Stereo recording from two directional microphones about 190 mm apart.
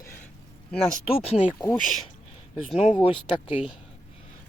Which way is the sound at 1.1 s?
30° left (ahead or behind).